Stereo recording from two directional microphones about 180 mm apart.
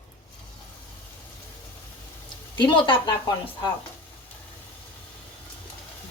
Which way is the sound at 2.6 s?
25° left (ahead or behind).